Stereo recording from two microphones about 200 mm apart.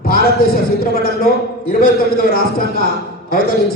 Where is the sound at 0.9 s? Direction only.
45° left (ahead or behind).